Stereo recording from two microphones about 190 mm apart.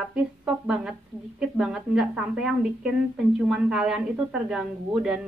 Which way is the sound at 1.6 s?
5° right (ahead or behind).